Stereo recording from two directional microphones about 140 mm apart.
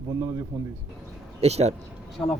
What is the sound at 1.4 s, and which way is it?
Speech, 50° right (ahead or behind).